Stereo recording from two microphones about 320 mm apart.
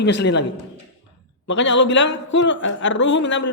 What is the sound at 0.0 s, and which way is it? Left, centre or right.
Speech, left.